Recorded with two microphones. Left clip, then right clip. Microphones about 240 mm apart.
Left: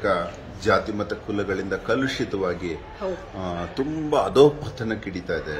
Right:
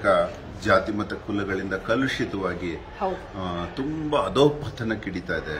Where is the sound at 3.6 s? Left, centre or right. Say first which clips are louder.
Left 2 dB; centre.